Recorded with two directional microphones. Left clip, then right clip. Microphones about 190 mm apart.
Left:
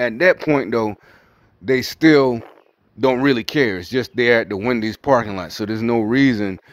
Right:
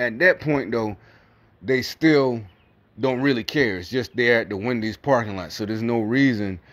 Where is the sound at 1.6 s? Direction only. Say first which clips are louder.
Left 5 dB; 30° left (ahead or behind).